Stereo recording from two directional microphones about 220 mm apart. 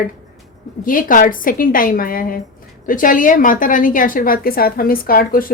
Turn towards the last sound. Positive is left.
turn(degrees=40)  # may be behind; listen again after turning